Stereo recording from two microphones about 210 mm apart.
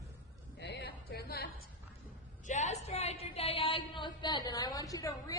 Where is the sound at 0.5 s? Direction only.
55° left (ahead or behind).